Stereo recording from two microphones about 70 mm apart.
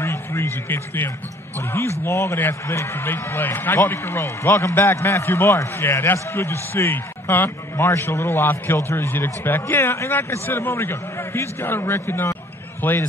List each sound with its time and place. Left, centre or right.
0.0 s a man's voice: left